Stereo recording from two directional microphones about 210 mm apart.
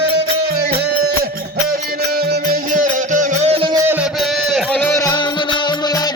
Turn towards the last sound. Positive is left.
turn(degrees=20)  # may be behind; listen again after turning